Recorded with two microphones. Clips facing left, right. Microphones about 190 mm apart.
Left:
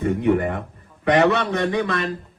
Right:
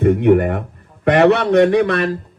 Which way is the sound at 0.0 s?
65° right (ahead or behind).